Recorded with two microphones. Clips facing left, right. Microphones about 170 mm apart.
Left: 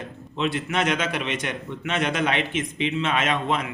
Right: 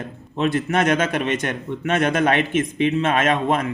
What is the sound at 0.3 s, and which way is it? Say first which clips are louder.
A man's voice: right 5 dB; 50° right (ahead or behind).